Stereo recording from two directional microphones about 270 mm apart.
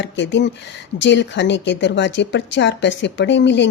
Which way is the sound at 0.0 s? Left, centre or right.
Left.